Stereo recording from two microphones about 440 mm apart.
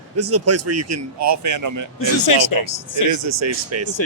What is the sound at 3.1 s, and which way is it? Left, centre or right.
Speech, right.